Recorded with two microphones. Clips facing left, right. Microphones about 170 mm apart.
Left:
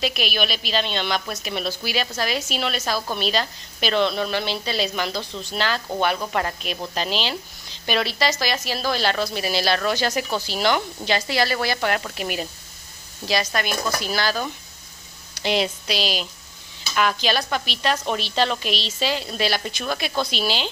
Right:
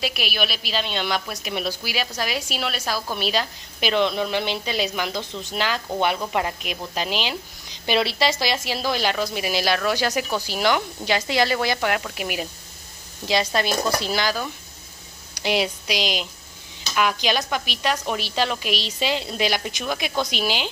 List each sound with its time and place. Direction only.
0.0 s a woman's voice: 10° right (ahead or behind)
13.3 s speech: 25° right (ahead or behind)
15.3 s a woman's voice: 10° right (ahead or behind)